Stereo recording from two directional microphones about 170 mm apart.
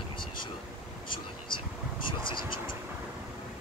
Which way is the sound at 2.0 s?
30° left (ahead or behind).